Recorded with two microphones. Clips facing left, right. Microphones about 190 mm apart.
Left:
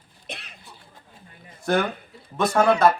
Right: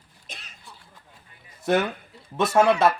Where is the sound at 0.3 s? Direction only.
60° left (ahead or behind).